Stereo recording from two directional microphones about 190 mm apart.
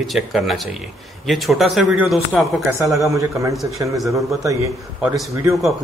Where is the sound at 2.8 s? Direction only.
15° right (ahead or behind).